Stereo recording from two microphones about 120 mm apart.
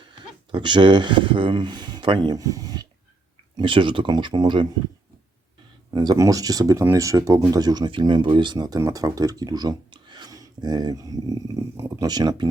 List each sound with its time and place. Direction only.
0.5 s speech: 40° right (ahead or behind)
3.5 s speech: 45° right (ahead or behind)
5.9 s speech: 35° right (ahead or behind)